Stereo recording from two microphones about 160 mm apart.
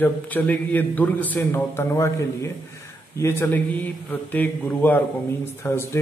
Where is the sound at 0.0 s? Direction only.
10° left (ahead or behind).